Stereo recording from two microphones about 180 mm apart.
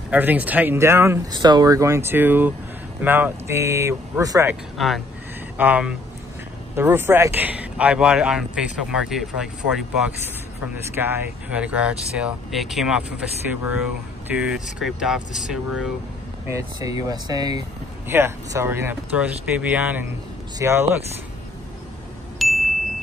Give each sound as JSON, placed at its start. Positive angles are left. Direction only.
{"t": 0.1, "sound": "speech", "side_deg": -10}
{"t": 4.7, "sound": "speech", "side_deg": 0}
{"t": 16.4, "sound": "speech", "side_deg": -15}
{"t": 22.4, "sound": "ding", "side_deg": 0}